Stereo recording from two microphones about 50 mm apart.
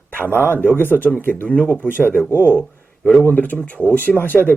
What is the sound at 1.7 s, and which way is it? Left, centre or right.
Speech, left.